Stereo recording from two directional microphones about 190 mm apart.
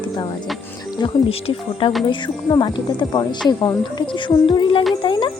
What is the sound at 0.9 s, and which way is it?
Speech, 30° left (ahead or behind).